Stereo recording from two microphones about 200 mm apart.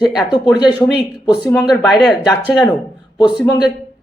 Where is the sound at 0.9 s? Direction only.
Centre (ahead or behind).